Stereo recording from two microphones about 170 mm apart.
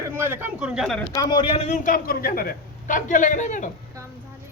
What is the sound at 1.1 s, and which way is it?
A man's voice, 25° left (ahead or behind).